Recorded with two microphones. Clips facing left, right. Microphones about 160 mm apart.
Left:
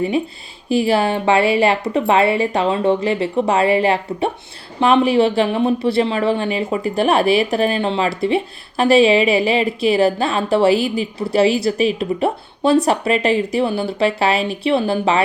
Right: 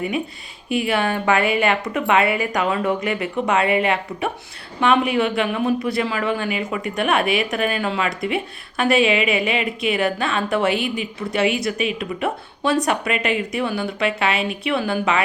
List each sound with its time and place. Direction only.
0.7 s speech: 30° left (ahead or behind)